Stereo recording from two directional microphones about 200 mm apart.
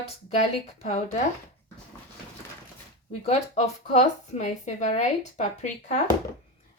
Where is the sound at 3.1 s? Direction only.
35° left (ahead or behind).